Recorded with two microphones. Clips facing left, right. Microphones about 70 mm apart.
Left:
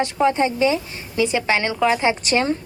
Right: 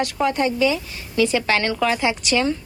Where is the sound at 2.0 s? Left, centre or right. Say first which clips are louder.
Left 1 dB; left.